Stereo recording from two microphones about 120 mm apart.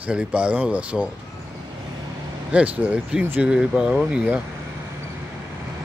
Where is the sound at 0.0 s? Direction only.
10° right (ahead or behind).